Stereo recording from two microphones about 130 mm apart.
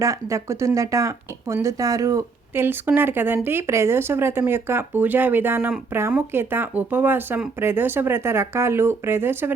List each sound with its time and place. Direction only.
0.0 s speech: 25° right (ahead or behind)